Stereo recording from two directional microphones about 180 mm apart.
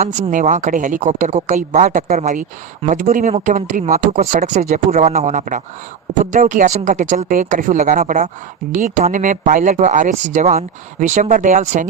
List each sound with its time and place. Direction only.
0.0 s speech: 45° right (ahead or behind)